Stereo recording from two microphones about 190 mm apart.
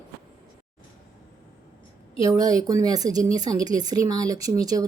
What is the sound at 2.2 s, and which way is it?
Speech, 20° right (ahead or behind).